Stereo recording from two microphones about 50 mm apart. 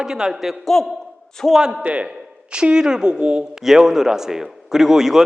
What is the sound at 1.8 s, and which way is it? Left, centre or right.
A man's voice, right.